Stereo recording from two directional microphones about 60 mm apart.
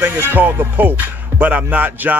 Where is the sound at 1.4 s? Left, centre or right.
Right.